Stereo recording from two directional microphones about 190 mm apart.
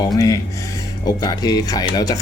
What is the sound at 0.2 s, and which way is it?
Speech, 15° left (ahead or behind).